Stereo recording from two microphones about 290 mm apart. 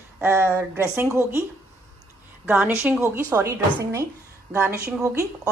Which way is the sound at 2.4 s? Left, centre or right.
Centre.